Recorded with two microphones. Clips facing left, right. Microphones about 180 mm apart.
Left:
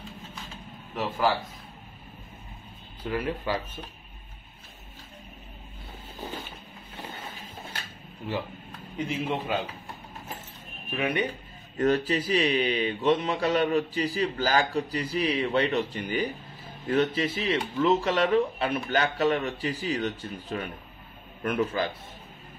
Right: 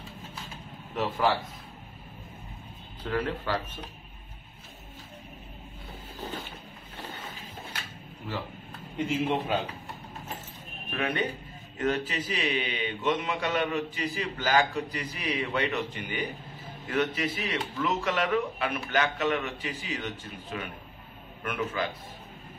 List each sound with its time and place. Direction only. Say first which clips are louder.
0.9 s a man's voice: even; centre (ahead or behind)
3.0 s speech: even; 10° left (ahead or behind)
8.9 s a man's voice: right 2 dB; 5° right (ahead or behind)
11.0 s speech: left 2 dB; 15° left (ahead or behind)
11.8 s a man's voice: left 5 dB; 40° left (ahead or behind)